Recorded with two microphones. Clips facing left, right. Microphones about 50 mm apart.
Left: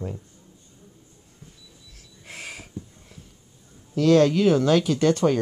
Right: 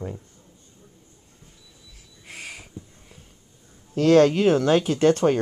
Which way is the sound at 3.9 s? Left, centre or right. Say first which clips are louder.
Right 1 dB; right.